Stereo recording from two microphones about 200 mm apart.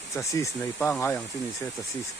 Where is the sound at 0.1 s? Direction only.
15° left (ahead or behind).